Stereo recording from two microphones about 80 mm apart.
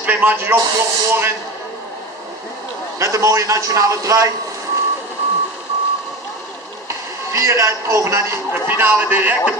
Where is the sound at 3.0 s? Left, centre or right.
Right.